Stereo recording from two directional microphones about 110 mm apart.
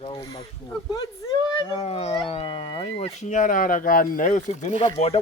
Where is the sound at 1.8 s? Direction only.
65° left (ahead or behind).